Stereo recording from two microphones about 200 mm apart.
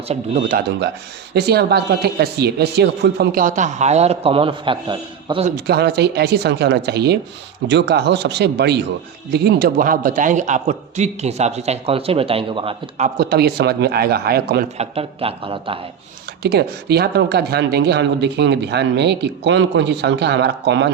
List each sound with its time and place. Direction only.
0.1 s a man's voice: 40° right (ahead or behind)
5.5 s a woman's voice: 50° right (ahead or behind); by 13.1 s 25° right (ahead or behind)
13.1 s a man's voice: 50° right (ahead or behind)
14.8 s speech: 30° right (ahead or behind)
16.4 s speech: 55° right (ahead or behind)